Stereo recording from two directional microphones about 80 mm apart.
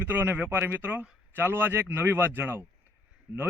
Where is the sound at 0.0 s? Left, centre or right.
Right.